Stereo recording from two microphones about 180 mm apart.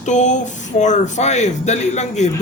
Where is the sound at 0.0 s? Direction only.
40° left (ahead or behind).